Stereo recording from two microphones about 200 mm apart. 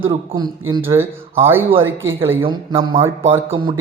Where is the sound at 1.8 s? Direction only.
75° right (ahead or behind).